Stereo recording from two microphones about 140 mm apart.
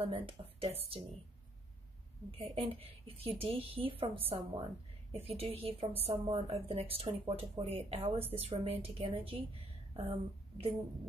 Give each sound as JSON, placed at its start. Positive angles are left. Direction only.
{"t": 0.0, "sound": "a woman's voice", "side_deg": -40}
{"t": 2.3, "sound": "a woman's voice", "side_deg": -45}